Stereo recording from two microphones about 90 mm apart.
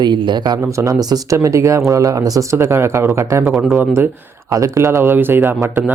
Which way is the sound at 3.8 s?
25° right (ahead or behind).